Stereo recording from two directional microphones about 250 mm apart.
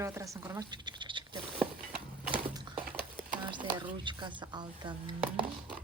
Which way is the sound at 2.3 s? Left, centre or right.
Right.